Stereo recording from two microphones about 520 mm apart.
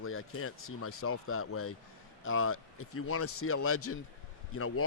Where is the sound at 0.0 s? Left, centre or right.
Left.